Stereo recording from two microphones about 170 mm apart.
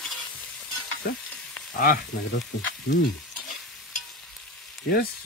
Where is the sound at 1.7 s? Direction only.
55° left (ahead or behind).